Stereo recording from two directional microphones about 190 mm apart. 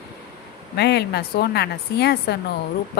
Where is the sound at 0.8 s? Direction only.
60° left (ahead or behind).